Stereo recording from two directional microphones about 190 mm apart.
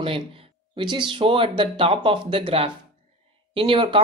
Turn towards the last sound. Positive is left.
turn(degrees=-25)  # may be behind; listen again after turning